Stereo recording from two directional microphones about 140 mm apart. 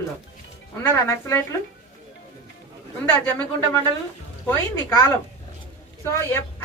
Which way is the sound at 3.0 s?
15° left (ahead or behind).